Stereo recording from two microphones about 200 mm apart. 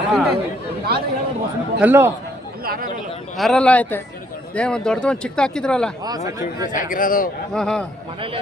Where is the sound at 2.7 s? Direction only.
45° right (ahead or behind).